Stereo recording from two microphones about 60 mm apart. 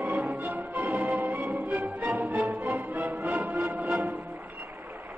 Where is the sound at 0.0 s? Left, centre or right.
Right.